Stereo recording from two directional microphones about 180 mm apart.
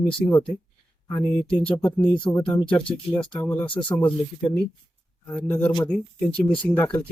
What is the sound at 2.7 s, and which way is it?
Speech, 5° left (ahead or behind).